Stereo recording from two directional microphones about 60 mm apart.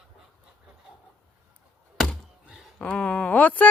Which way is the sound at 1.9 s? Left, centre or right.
Centre.